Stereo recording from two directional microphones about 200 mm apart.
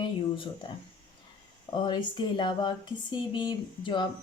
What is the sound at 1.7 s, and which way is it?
A woman's voice, 25° left (ahead or behind).